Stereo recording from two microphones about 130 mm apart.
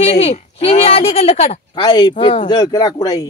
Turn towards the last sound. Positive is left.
turn(degrees=30)  # may be behind; listen again after turning